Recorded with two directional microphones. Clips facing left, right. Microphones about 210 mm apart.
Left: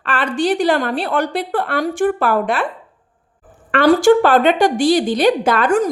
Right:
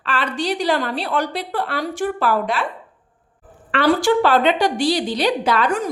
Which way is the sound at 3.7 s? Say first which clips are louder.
Left 6 dB; 45° left (ahead or behind).